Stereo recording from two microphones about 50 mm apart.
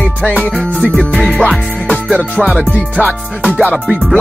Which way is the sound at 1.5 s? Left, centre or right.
Centre.